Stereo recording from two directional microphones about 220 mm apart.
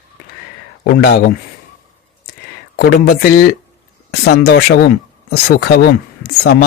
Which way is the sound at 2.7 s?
45° left (ahead or behind).